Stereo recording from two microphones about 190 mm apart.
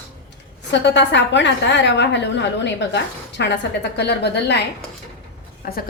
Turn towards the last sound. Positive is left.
turn(degrees=50)  # may be behind; listen again after turning